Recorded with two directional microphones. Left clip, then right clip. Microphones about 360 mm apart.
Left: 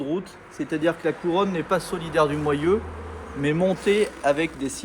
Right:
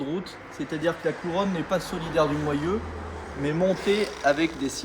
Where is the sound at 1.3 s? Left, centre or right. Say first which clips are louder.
Left 5 dB; left.